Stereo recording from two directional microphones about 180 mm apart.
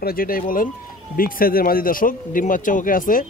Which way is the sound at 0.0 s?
55° left (ahead or behind).